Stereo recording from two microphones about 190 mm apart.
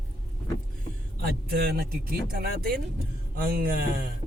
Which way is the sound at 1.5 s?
60° right (ahead or behind).